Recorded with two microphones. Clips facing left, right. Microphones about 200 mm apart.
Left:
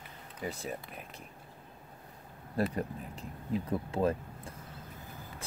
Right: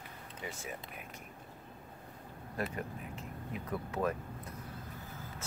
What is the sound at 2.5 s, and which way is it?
Speech, 35° left (ahead or behind).